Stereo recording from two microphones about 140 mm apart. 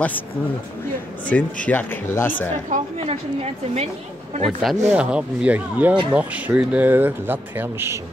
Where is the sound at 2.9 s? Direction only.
45° right (ahead or behind).